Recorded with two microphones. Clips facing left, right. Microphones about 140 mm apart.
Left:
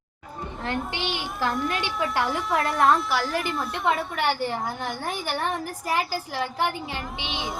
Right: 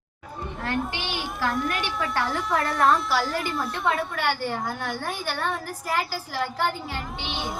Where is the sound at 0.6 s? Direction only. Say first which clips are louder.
Even; 20° left (ahead or behind).